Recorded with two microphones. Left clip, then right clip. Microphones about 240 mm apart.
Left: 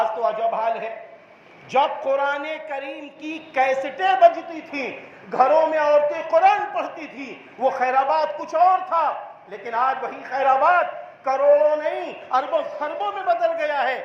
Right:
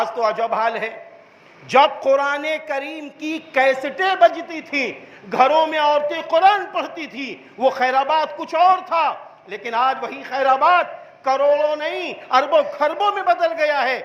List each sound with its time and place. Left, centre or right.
0.0 s a woman's voice: right